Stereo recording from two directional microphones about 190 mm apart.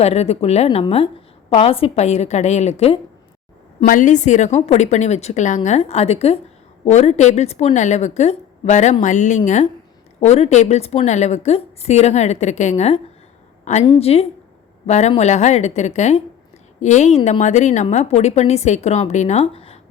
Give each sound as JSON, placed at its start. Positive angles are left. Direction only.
{"t": 0.0, "sound": "a woman's voice", "side_deg": 35}